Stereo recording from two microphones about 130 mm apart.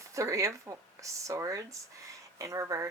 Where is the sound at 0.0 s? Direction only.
25° right (ahead or behind).